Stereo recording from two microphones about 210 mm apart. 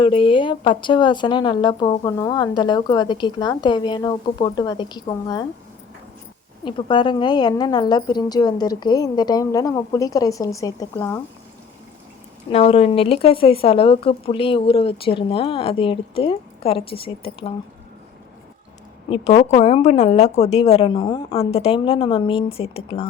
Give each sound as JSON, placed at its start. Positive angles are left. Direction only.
{"t": 0.0, "sound": "speech", "side_deg": 25}
{"t": 6.7, "sound": "speech", "side_deg": 25}
{"t": 12.5, "sound": "speech", "side_deg": 30}
{"t": 19.1, "sound": "speech", "side_deg": 30}